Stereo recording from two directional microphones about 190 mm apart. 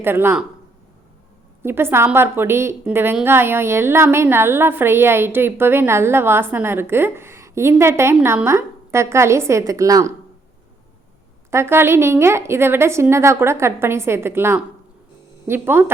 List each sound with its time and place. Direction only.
0.0 s a woman's voice: 10° right (ahead or behind)
1.6 s a woman's voice: 10° right (ahead or behind)
11.5 s a woman's voice: 15° right (ahead or behind)